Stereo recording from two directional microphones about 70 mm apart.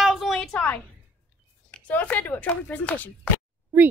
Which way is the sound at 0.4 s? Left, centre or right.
Centre.